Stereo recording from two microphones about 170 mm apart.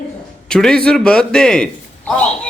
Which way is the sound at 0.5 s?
5° left (ahead or behind).